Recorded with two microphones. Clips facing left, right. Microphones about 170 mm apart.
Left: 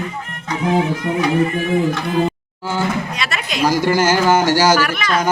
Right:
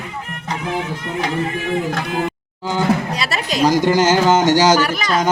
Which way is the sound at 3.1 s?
35° right (ahead or behind).